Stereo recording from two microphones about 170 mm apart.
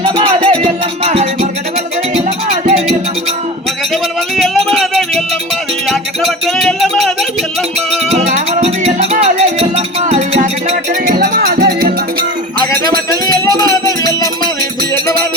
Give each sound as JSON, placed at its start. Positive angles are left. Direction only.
{"t": 0.0, "sound": "music", "side_deg": -35}
{"t": 4.4, "sound": "music", "side_deg": 0}
{"t": 8.6, "sound": "music", "side_deg": -40}
{"t": 11.0, "sound": "music", "side_deg": -60}